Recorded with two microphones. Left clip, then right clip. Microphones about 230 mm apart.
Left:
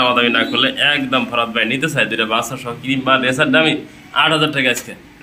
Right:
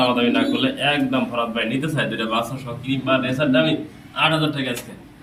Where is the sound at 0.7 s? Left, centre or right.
Centre.